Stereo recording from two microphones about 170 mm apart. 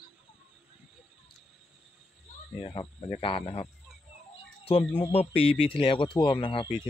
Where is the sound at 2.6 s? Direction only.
30° left (ahead or behind).